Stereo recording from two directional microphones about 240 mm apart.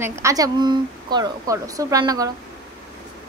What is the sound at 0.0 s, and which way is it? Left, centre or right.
Speech, centre.